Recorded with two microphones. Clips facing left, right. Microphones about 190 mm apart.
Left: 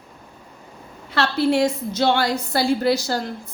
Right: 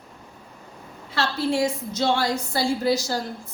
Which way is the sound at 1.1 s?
65° left (ahead or behind).